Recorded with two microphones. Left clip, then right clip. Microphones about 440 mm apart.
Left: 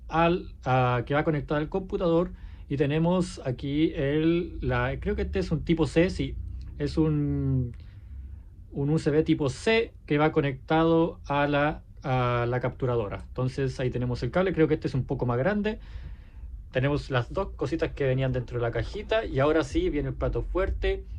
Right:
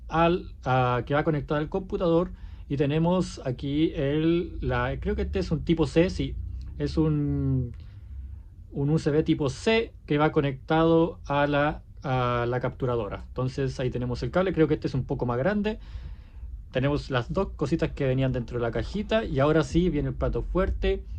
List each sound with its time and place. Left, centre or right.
0.1 s speech: centre
8.8 s speech: centre